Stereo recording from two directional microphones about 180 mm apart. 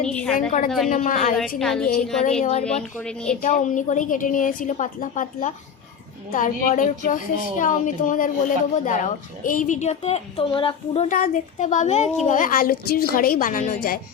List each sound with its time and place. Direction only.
0.1 s a woman's voice: 5° left (ahead or behind)
0.3 s speech: 50° left (ahead or behind)
1.4 s a woman's voice: centre (ahead or behind)
2.4 s speech: 35° left (ahead or behind)
11.1 s speech: 45° left (ahead or behind)